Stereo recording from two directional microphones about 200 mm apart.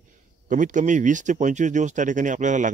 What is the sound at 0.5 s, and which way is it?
Speech, 40° right (ahead or behind).